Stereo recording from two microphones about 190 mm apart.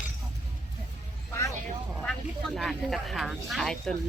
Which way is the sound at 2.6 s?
Centre (ahead or behind).